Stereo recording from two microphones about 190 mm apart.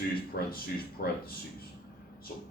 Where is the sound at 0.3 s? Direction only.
60° left (ahead or behind).